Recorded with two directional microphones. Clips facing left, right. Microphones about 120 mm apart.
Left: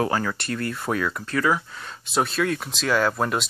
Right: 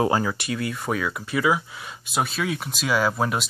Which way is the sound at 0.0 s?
20° right (ahead or behind).